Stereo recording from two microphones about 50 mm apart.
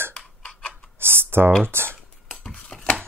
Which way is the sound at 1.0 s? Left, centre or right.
Right.